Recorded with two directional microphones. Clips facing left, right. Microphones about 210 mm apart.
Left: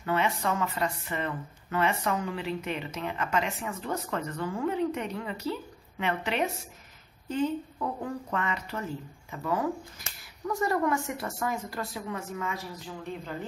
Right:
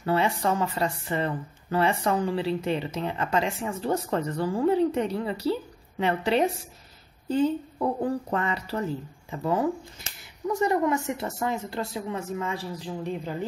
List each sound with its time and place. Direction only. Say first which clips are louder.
0.0 s speech: right 4 dB; 35° right (ahead or behind)